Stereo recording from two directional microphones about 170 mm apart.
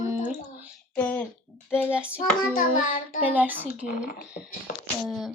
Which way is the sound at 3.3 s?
10° right (ahead or behind).